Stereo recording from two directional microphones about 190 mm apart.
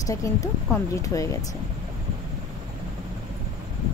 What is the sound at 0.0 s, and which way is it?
A woman's voice, 15° left (ahead or behind).